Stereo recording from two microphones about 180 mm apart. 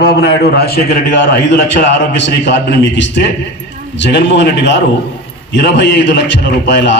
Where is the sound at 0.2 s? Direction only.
60° left (ahead or behind).